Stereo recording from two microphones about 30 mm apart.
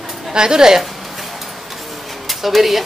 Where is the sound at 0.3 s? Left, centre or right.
Right.